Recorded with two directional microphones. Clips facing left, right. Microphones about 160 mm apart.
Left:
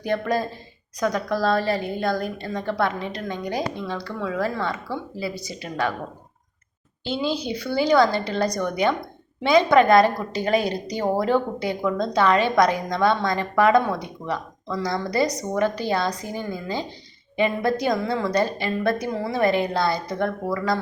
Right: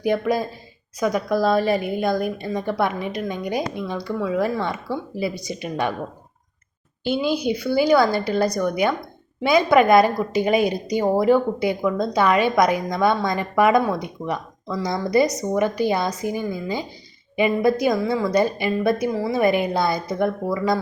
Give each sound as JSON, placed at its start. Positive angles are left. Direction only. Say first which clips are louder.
{"t": 0.0, "sound": "a woman's voice", "louder": "right 3 dB", "side_deg": -10}
{"t": 7.0, "sound": "a woman's voice", "louder": "right 4 dB", "side_deg": -15}